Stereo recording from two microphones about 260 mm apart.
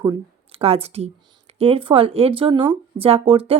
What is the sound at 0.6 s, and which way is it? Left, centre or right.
Speech, right.